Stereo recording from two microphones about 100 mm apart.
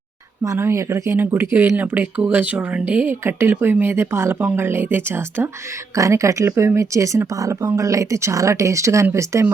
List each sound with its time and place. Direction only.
0.4 s speech: 30° right (ahead or behind)